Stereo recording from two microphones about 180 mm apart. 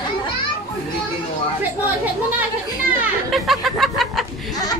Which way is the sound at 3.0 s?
Centre (ahead or behind).